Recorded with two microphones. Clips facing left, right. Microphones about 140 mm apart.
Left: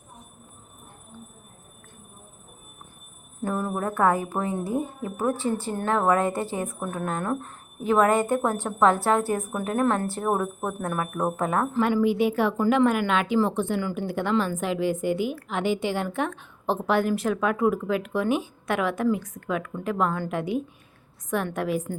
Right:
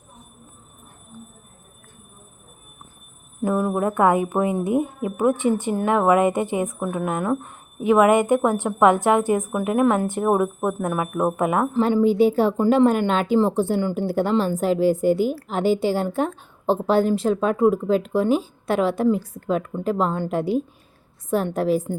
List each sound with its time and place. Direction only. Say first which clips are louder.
3.4 s speech: right 6 dB; 10° right (ahead or behind)
11.8 s speech: right 5 dB; 30° right (ahead or behind)